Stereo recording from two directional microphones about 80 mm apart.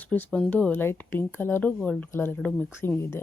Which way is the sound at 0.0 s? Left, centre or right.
Centre.